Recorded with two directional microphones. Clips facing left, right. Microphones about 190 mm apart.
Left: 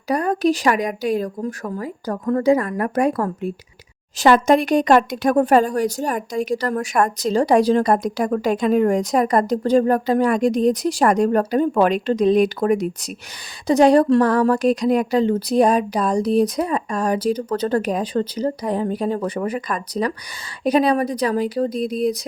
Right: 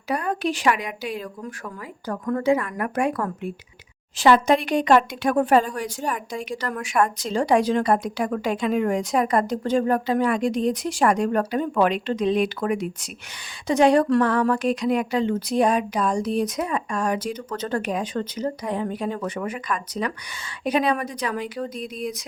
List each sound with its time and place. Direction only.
0.1 s speech: 40° left (ahead or behind)